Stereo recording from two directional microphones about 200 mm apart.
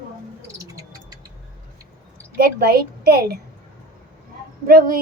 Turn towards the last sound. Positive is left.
turn(degrees=-45)  # may be behind; listen again after turning